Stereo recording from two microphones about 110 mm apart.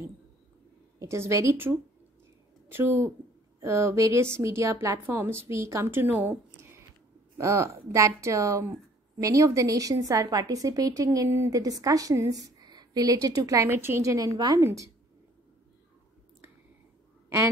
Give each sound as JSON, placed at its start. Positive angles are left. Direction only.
{"t": 0.9, "sound": "a woman's voice", "side_deg": -25}
{"t": 7.3, "sound": "a woman's voice", "side_deg": -25}
{"t": 14.6, "sound": "a woman's voice", "side_deg": -25}